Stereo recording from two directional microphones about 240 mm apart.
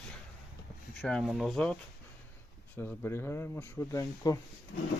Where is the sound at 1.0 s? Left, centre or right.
Centre.